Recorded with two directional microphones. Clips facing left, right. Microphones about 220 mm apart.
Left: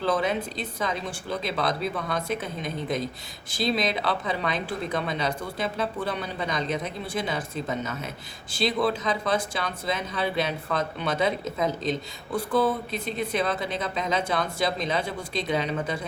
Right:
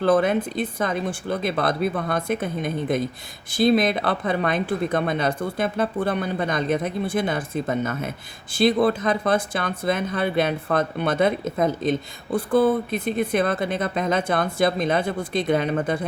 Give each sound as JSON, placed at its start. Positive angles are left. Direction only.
{"t": 0.0, "sound": "speech", "side_deg": -55}